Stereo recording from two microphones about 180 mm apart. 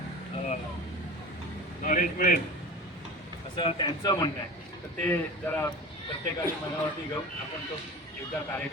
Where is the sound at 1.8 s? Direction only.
45° left (ahead or behind).